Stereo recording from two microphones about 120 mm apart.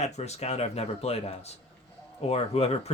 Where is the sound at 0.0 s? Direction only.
65° left (ahead or behind).